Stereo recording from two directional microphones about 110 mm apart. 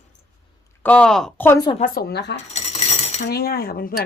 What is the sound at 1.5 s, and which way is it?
Speech, 40° left (ahead or behind).